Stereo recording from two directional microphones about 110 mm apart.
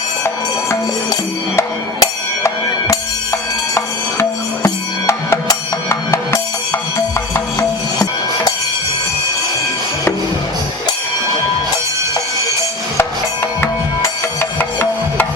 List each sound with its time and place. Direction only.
0.7 s music: 30° left (ahead or behind)
14.6 s music: 15° left (ahead or behind)